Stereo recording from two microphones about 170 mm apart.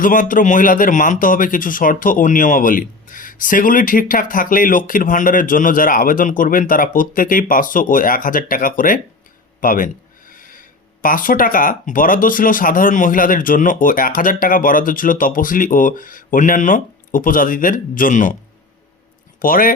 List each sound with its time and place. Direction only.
0.0 s speech: 50° left (ahead or behind)
19.4 s speech: 55° left (ahead or behind)